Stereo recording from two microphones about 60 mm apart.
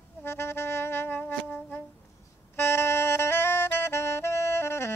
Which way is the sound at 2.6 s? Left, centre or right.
Left.